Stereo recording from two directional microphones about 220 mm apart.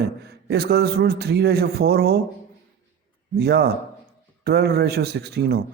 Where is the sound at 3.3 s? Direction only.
45° right (ahead or behind).